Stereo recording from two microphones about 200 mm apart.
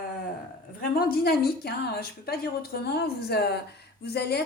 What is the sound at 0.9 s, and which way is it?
A woman's voice, 50° left (ahead or behind).